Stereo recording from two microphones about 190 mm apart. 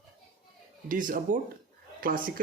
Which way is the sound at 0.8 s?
45° right (ahead or behind).